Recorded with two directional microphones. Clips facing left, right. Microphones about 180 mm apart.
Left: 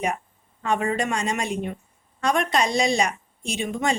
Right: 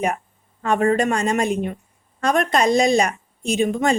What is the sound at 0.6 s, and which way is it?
A woman's voice, 50° right (ahead or behind).